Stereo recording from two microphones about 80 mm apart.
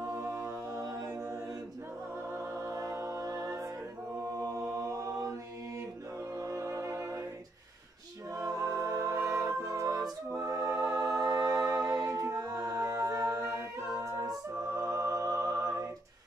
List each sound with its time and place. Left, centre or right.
0.1 s a capella: right
2.3 s music: right
4.4 s mantra: right
6.4 s music: right
8.4 s music: right